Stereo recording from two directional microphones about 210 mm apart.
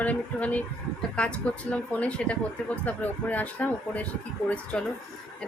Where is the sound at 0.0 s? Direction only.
5° left (ahead or behind).